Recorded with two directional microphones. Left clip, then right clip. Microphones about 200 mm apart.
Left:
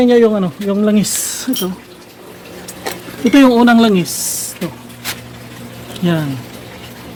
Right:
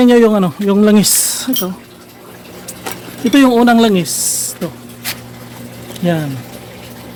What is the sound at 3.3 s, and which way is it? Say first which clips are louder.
Speech: even; 5° right (ahead or behind).